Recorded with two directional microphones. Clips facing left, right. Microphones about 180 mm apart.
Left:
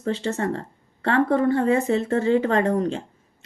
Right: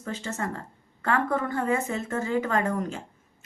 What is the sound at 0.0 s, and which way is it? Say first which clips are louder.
Speech: left 8 dB; 35° left (ahead or behind).